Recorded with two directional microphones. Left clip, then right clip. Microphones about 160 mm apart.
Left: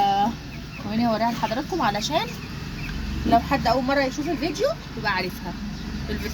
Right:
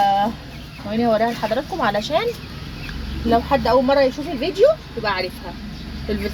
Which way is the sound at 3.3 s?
50° right (ahead or behind).